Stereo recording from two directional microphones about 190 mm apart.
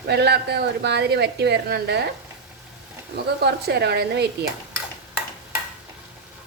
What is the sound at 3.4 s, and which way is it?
Speech, 60° right (ahead or behind).